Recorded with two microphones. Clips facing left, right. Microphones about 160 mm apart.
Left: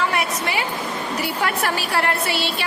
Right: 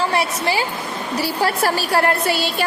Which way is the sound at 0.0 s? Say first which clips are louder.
Right 3 dB; 30° right (ahead or behind).